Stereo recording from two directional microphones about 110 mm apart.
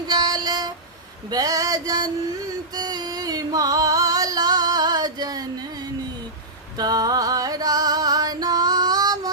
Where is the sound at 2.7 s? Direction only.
40° right (ahead or behind).